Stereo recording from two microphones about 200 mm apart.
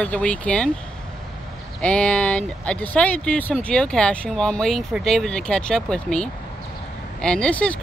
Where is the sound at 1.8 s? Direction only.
5° left (ahead or behind).